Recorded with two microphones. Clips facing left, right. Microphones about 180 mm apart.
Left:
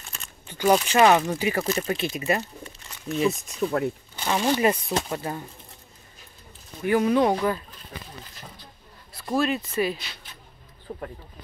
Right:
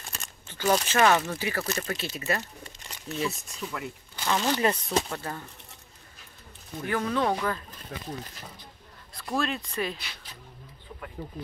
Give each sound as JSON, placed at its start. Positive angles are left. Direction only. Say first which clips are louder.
{"t": 0.5, "sound": "speech", "louder": "left 5 dB", "side_deg": 15}
{"t": 3.6, "sound": "speech", "louder": "left 11 dB", "side_deg": 50}
{"t": 4.2, "sound": "speech", "louder": "left 3 dB", "side_deg": 15}
{"t": 6.9, "sound": "speech", "louder": "left 7 dB", "side_deg": 15}
{"t": 9.3, "sound": "speech", "louder": "left 5 dB", "side_deg": 5}
{"t": 10.9, "sound": "speech", "louder": "left 9 dB", "side_deg": 40}